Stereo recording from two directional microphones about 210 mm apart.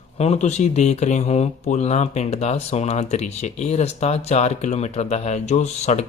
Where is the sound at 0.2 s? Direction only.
30° left (ahead or behind).